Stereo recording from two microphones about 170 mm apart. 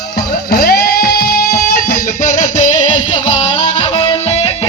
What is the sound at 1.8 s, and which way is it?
Music, 55° left (ahead or behind).